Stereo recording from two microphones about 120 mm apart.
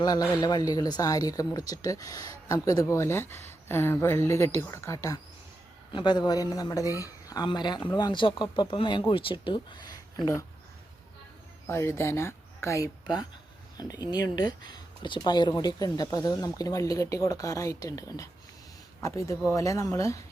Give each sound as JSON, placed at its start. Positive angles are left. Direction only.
{"t": 0.0, "sound": "speech", "side_deg": 35}
{"t": 5.9, "sound": "speech", "side_deg": 40}
{"t": 11.7, "sound": "speech", "side_deg": 25}